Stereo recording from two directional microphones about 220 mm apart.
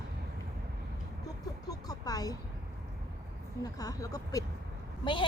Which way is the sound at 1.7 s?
15° left (ahead or behind).